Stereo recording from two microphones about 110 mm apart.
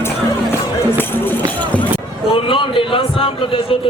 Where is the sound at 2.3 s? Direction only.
50° left (ahead or behind).